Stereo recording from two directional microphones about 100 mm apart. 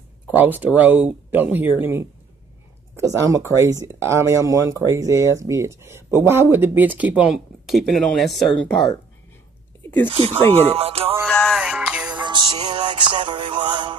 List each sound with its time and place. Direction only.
0.4 s speech: 20° right (ahead or behind); by 8.5 s centre (ahead or behind)
10.0 s speech: 75° right (ahead or behind)
10.7 s music: 80° right
11.2 s music: 10° left (ahead or behind)
11.5 s music: 5° right (ahead or behind)
12.2 s music: 45° right (ahead or behind)